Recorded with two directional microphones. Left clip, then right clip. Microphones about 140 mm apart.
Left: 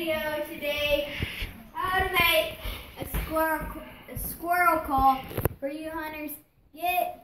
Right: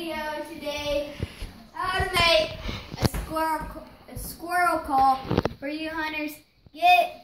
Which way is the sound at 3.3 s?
20° right (ahead or behind).